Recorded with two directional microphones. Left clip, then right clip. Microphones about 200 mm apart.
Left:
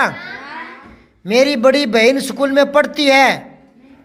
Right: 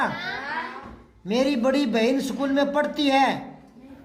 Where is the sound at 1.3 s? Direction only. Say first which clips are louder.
Left 11 dB; 40° left (ahead or behind).